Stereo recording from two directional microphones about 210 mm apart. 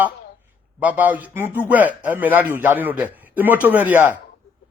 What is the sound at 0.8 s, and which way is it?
A man's voice, 5° right (ahead or behind).